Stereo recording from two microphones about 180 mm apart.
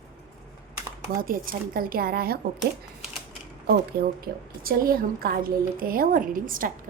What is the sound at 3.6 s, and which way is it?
A woman's voice, 55° right (ahead or behind).